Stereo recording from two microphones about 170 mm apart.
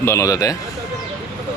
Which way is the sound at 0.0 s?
15° left (ahead or behind).